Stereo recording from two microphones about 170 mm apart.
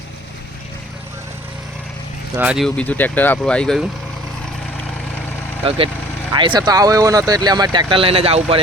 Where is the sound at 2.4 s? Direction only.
5° right (ahead or behind).